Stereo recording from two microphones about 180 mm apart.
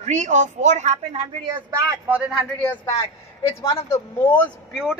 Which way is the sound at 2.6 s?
15° left (ahead or behind).